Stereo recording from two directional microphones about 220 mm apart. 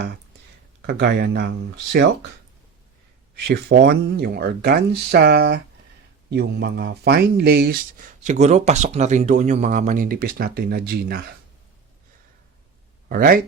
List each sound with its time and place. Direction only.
0.8 s speech: 50° right (ahead or behind)
3.3 s speech: 45° right (ahead or behind)
13.1 s speech: 40° right (ahead or behind)